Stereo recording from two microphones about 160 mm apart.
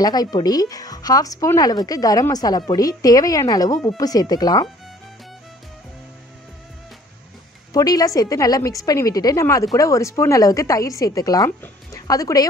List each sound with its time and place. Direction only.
0.0 s speech: 25° left (ahead or behind)
7.7 s speech: 25° left (ahead or behind)